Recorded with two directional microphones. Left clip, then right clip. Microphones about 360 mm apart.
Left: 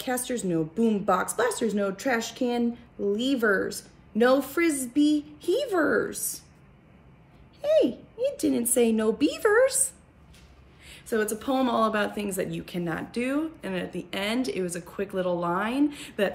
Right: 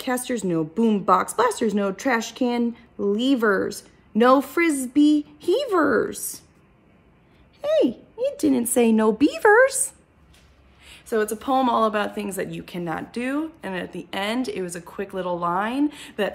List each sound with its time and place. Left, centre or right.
0.0 s a woman's voice: right
7.6 s a woman's voice: centre